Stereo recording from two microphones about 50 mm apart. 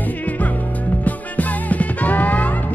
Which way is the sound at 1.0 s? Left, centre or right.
Left.